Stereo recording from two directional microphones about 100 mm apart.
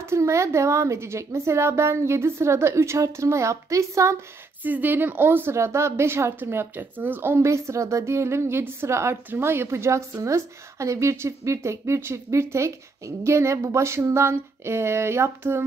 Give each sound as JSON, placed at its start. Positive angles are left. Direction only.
{"t": 0.0, "sound": "a woman's voice", "side_deg": -30}
{"t": 4.6, "sound": "a woman's voice", "side_deg": -20}